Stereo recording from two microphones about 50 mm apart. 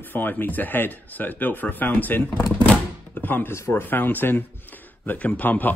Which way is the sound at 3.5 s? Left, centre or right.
Left.